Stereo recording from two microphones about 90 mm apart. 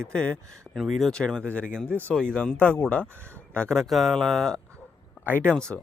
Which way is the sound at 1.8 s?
25° right (ahead or behind).